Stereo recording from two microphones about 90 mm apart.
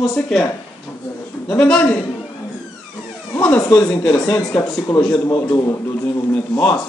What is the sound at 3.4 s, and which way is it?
Speech, 10° left (ahead or behind).